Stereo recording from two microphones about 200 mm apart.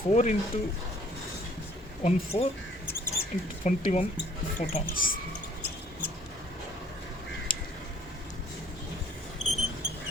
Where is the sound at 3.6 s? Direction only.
35° left (ahead or behind).